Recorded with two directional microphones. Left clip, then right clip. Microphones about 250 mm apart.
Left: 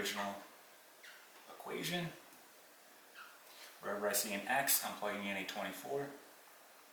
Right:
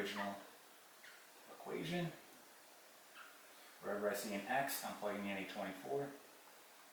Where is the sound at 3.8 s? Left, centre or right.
Centre.